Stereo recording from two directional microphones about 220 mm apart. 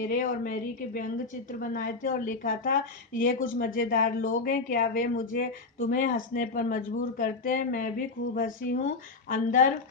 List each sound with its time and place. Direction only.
0.0 s a woman's voice: 40° left (ahead or behind)